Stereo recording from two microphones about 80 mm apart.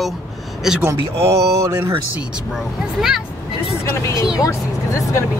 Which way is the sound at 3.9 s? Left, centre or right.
Left.